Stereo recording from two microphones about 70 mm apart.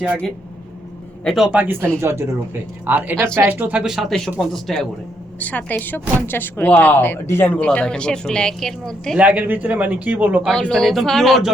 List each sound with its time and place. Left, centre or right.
1.5 s a man's voice: right
3.8 s speech: centre
5.4 s speech: left
7.5 s a woman's voice: centre
9.1 s speech: centre
10.5 s speech: centre